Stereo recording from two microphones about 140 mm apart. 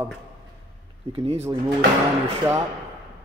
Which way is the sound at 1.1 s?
40° right (ahead or behind).